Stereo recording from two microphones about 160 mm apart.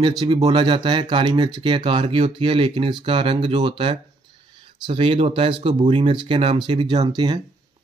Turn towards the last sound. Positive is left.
turn(degrees=-25)  # may be behind; listen again after turning